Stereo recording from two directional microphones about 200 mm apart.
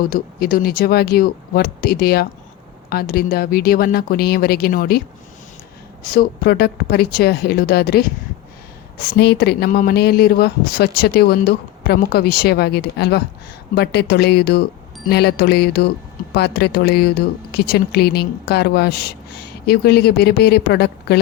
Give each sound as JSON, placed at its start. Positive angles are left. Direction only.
{"t": 0.0, "sound": "speech", "side_deg": 50}
{"t": 6.1, "sound": "speech", "side_deg": 50}